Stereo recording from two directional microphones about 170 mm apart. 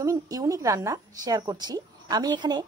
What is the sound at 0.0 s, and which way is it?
A woman's voice, 20° right (ahead or behind).